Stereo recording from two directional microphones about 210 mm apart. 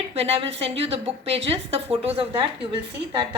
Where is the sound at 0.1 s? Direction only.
30° right (ahead or behind).